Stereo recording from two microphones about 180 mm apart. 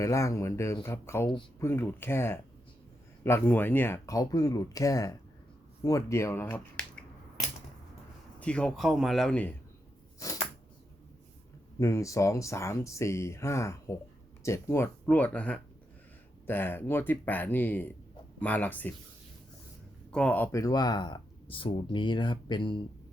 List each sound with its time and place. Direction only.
0.0 s speech: 15° left (ahead or behind)
8.4 s speech: 5° left (ahead or behind)
10.2 s a sound: 15° left (ahead or behind)
11.8 s speech: 15° left (ahead or behind)
20.1 s speech: 5° left (ahead or behind); by 22.8 s 25° left (ahead or behind)